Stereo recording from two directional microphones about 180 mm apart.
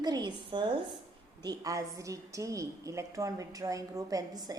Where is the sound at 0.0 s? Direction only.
25° right (ahead or behind).